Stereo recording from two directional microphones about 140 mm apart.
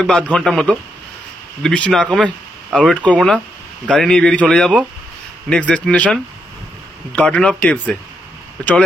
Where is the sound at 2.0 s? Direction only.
10° right (ahead or behind).